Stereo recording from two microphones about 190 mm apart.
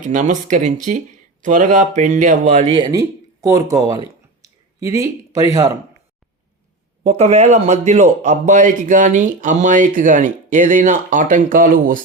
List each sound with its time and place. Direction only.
0.0 s a man's voice: 40° right (ahead or behind)
2.6 s speech: 25° right (ahead or behind)
7.0 s a man's voice: 35° right (ahead or behind)